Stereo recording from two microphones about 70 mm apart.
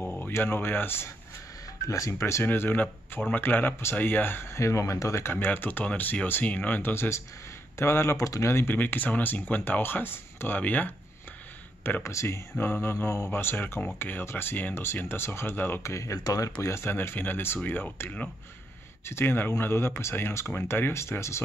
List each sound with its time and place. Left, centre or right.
0.0 s a sound: left
0.3 s speech: left
1.9 s speech: left
2.4 s speech: left
5.2 s speech: left
8.7 s speech: left
12.0 s speech: left
15.8 s speech: left
16.6 s speech: left